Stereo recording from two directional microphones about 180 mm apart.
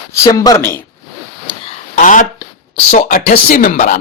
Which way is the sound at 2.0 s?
45° left (ahead or behind).